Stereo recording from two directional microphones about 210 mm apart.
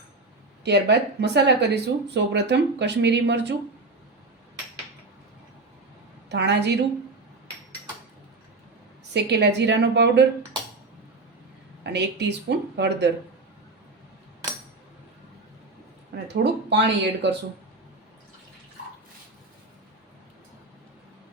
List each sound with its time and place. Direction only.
0.6 s speech: 55° right (ahead or behind)
6.2 s a woman's voice: 55° right (ahead or behind)
9.1 s a woman's voice: 55° right (ahead or behind)
11.8 s speech: 55° right (ahead or behind)
16.2 s speech: 55° right (ahead or behind)